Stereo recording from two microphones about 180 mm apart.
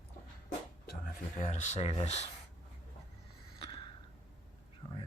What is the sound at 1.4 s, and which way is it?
Speech, 45° left (ahead or behind).